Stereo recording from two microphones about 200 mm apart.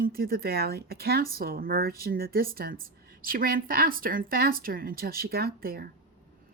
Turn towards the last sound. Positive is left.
turn(degrees=-50)  # may be behind; listen again after turning